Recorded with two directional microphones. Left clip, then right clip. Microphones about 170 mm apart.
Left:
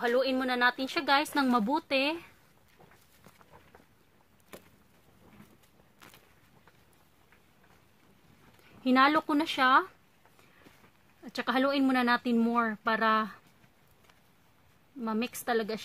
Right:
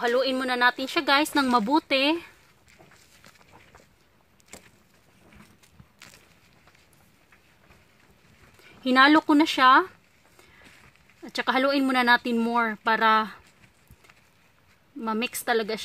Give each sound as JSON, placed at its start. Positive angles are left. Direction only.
{"t": 0.0, "sound": "speech", "side_deg": -35}
{"t": 8.6, "sound": "speech", "side_deg": -35}
{"t": 11.2, "sound": "speech", "side_deg": -40}
{"t": 15.0, "sound": "speech", "side_deg": -40}